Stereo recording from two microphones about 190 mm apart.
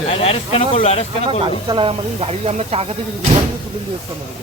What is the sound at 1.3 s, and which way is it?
Speech, 30° right (ahead or behind).